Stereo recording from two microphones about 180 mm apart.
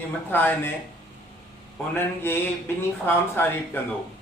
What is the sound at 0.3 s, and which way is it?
Speech, 10° left (ahead or behind).